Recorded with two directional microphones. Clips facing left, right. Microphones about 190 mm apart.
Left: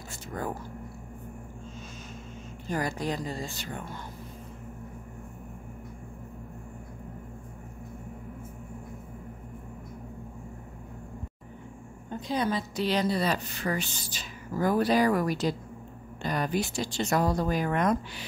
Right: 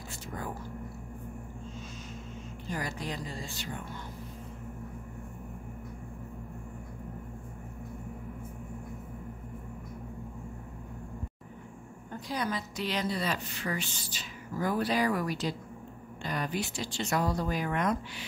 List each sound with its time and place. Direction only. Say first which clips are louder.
2.7 s speech: left 6 dB; 45° left (ahead or behind)
12.1 s a woman's voice: left 5 dB; 25° left (ahead or behind); by 18.2 s 45° left (ahead or behind)